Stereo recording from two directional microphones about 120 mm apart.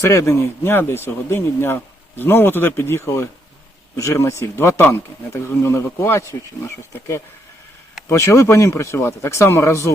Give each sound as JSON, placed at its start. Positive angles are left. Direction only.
{"t": 0.0, "sound": "speech", "side_deg": 25}